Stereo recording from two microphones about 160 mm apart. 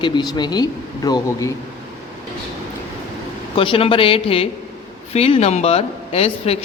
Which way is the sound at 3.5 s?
35° left (ahead or behind).